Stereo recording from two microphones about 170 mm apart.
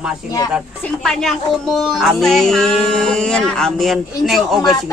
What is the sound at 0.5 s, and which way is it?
Speech, centre (ahead or behind).